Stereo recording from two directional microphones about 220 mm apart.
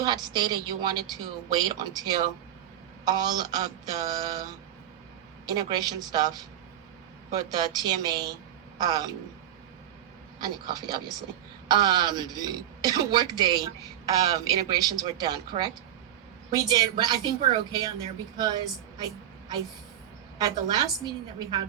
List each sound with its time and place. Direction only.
0.0 s a woman's voice: 20° right (ahead or behind)
5.5 s a woman's voice: 20° right (ahead or behind)
10.4 s a woman's voice: 20° right (ahead or behind)
20.4 s speech: 20° right (ahead or behind)